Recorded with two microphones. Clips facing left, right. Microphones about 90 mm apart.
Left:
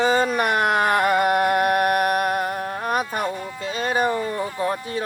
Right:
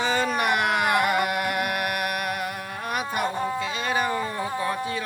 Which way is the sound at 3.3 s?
35° right (ahead or behind).